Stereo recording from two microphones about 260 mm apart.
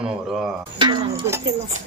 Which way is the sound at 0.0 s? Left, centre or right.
Centre.